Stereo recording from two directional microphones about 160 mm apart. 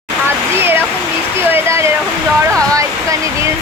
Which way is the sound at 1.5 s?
15° right (ahead or behind).